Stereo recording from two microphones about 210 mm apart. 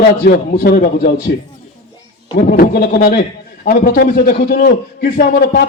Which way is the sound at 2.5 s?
50° left (ahead or behind).